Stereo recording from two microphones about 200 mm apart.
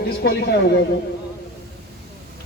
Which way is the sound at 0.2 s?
50° left (ahead or behind).